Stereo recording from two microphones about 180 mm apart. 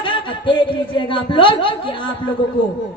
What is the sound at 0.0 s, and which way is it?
A man's voice, 25° left (ahead or behind).